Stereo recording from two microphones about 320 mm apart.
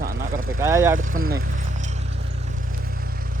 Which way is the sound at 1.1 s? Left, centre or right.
Right.